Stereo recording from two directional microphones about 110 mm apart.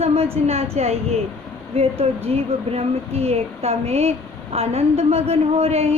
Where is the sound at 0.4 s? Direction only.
65° right (ahead or behind).